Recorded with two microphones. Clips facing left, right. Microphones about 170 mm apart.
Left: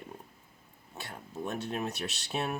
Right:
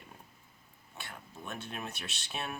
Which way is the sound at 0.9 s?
35° left (ahead or behind).